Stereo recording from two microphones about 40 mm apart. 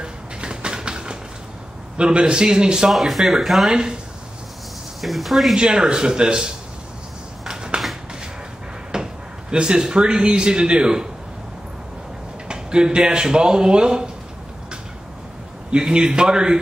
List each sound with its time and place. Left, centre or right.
0.0 s a sound: right
2.0 s a man's voice: right
2.9 s speech: centre
3.7 s speech: centre
5.0 s speech: centre
5.6 s a man's voice: right
7.4 s a sound: centre
8.9 s speech: centre
12.4 s speech: right
15.7 s a man's voice: right